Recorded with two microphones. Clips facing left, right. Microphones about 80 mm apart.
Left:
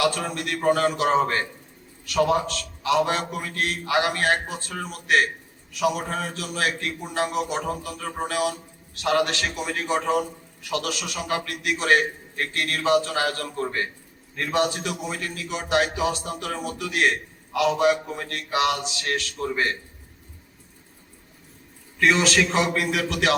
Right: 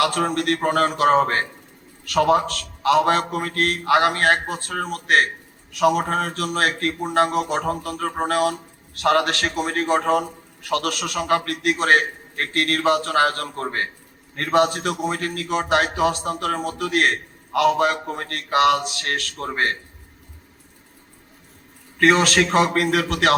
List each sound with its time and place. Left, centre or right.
0.0 s a man's voice: right
21.9 s a man's voice: right